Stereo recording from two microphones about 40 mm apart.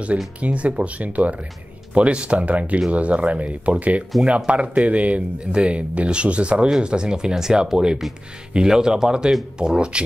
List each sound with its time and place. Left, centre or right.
0.4 s speech: right